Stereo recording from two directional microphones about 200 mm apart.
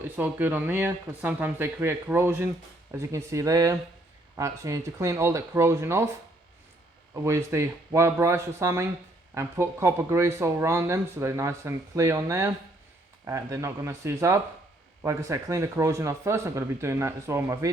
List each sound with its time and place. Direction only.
0.2 s speech: 10° right (ahead or behind)
7.3 s speech: 15° right (ahead or behind)